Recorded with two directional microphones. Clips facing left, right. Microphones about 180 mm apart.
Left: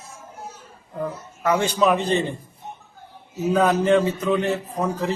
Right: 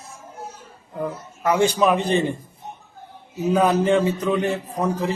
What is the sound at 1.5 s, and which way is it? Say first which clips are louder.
Speech: right 1 dB; 15° right (ahead or behind).